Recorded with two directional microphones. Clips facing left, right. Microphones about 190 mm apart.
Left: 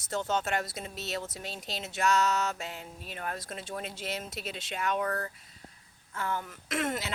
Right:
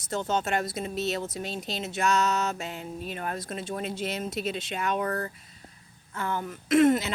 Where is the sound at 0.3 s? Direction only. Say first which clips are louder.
Right 4 dB; 15° right (ahead or behind).